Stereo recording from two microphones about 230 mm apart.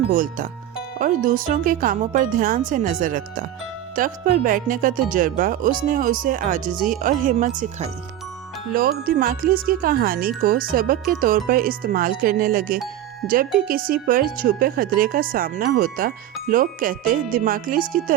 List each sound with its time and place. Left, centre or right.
0.1 s speech: right
9.0 s speech: right